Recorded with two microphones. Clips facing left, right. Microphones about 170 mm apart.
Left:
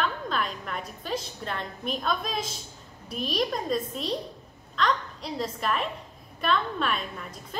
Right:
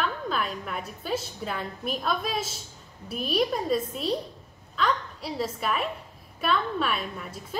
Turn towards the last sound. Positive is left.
turn(degrees=-5)  # may be behind; listen again after turning